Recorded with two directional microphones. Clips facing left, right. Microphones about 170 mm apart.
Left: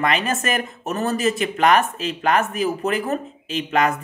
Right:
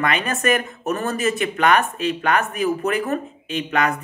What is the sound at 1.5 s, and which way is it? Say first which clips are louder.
Speech: left 2 dB; 30° left (ahead or behind).